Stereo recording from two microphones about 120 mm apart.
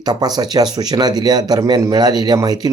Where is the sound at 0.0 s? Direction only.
35° right (ahead or behind).